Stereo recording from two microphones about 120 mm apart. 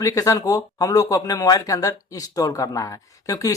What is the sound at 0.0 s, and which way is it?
Speech, 25° left (ahead or behind).